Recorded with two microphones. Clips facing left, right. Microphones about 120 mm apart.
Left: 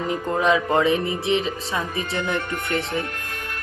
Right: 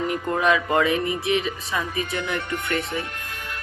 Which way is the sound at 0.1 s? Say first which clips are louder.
Left 3 dB; 20° left (ahead or behind).